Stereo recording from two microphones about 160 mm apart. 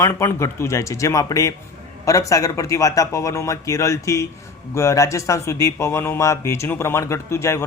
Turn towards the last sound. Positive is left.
turn(degrees=15)  # may be behind; listen again after turning